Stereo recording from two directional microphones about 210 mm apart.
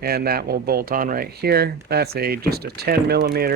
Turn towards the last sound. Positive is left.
turn(degrees=-45)  # may be behind; listen again after turning